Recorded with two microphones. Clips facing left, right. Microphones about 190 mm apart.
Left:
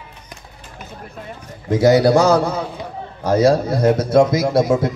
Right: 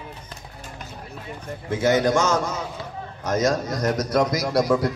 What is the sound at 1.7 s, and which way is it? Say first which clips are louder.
A man's voice: left 7 dB; 35° left (ahead or behind).